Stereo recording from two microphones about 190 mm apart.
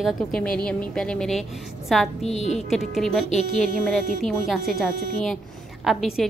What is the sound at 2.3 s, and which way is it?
Speech, 35° left (ahead or behind).